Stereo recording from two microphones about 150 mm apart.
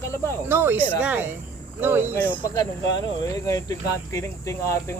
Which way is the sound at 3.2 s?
20° left (ahead or behind).